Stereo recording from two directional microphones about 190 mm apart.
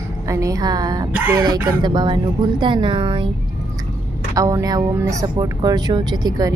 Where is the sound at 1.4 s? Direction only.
20° right (ahead or behind).